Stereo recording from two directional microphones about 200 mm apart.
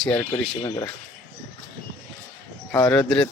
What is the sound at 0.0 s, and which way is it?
Speech, 5° left (ahead or behind).